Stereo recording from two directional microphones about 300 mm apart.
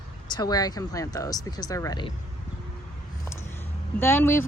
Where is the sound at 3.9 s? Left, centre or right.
Centre.